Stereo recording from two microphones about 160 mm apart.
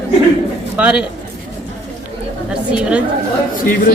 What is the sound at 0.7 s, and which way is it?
Speech, 10° right (ahead or behind).